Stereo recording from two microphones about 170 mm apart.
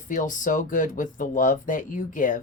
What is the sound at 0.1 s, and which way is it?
Speech, 50° left (ahead or behind).